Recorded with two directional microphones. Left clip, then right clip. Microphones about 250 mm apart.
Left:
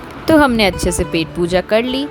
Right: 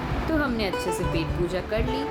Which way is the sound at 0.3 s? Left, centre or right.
Left.